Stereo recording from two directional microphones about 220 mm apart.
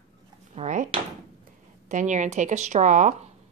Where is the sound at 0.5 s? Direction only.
30° right (ahead or behind).